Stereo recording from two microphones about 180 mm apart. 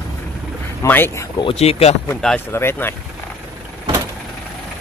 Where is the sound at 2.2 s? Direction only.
10° left (ahead or behind).